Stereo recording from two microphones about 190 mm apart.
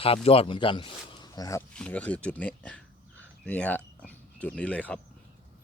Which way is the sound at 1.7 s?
5° left (ahead or behind).